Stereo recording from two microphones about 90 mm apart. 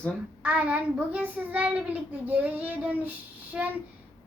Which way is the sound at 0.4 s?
15° right (ahead or behind).